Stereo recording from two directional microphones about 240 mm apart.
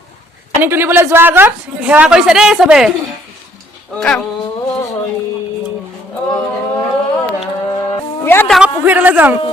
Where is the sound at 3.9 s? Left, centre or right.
Centre.